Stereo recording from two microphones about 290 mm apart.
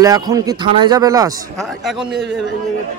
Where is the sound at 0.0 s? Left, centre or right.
Centre.